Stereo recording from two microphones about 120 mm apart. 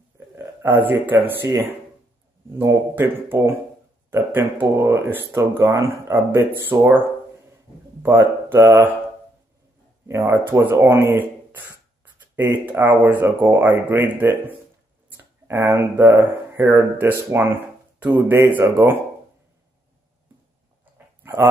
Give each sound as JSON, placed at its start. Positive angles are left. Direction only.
{"t": 0.4, "sound": "a sound", "side_deg": -20}
{"t": 0.8, "sound": "speech", "side_deg": -15}
{"t": 2.6, "sound": "speech", "side_deg": -20}
{"t": 8.0, "sound": "speech", "side_deg": -20}
{"t": 10.0, "sound": "speech", "side_deg": -20}
{"t": 21.2, "sound": "a sound", "side_deg": -20}